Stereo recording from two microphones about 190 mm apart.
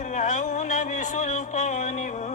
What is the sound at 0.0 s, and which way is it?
Music, 40° left (ahead or behind).